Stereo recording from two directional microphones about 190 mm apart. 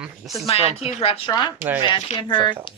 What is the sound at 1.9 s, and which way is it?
Speech, 25° left (ahead or behind).